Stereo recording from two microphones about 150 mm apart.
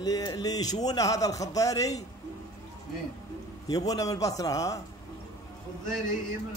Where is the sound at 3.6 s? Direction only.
25° left (ahead or behind).